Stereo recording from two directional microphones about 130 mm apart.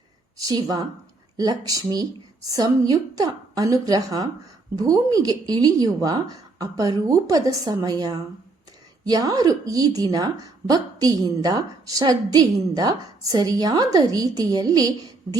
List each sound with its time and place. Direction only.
0.3 s a woman's voice: 30° right (ahead or behind)